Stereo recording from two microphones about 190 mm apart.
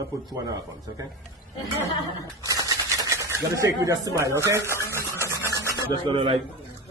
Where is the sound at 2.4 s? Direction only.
20° right (ahead or behind).